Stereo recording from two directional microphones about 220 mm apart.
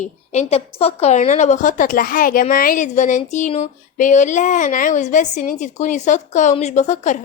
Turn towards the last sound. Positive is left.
turn(degrees=30)  # may be behind; listen again after turning